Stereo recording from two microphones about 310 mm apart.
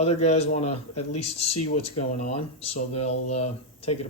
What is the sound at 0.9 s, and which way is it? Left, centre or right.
Speech, left.